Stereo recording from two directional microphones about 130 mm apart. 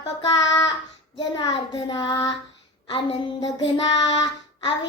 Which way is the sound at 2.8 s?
30° left (ahead or behind).